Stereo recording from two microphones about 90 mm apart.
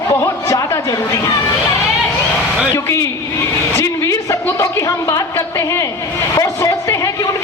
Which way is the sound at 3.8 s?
35° left (ahead or behind).